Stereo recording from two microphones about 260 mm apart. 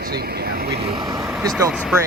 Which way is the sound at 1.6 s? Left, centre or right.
Centre.